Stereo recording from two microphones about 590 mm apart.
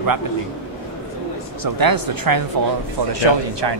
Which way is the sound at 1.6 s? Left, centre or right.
Right.